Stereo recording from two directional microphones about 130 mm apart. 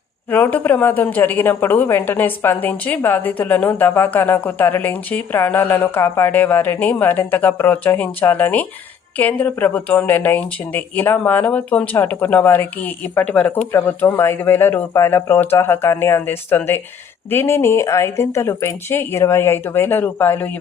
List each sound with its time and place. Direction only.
0.3 s a woman's voice: 15° left (ahead or behind)